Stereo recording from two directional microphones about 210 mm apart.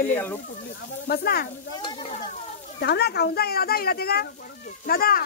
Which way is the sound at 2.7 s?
50° left (ahead or behind).